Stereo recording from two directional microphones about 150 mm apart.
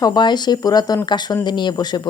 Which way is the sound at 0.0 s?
30° left (ahead or behind).